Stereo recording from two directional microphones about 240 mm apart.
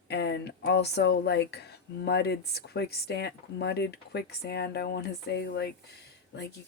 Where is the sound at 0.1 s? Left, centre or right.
Left.